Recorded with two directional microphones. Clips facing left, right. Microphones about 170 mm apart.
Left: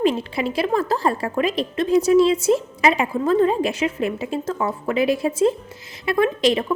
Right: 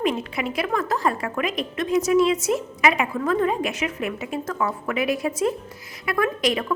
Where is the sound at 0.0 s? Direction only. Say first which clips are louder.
Left 4 dB; 30° left (ahead or behind).